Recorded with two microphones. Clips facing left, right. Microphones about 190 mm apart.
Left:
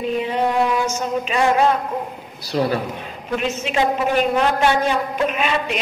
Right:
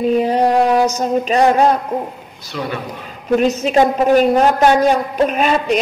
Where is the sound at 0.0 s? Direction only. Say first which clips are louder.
Right 6 dB; 40° right (ahead or behind).